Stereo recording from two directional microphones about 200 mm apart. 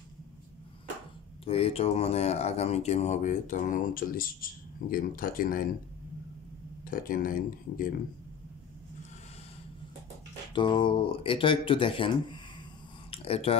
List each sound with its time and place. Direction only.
1.4 s speech: 30° left (ahead or behind); by 5.7 s 45° left (ahead or behind)
6.8 s speech: 45° left (ahead or behind)
10.5 s speech: 25° left (ahead or behind)
13.1 s a sound: 30° left (ahead or behind)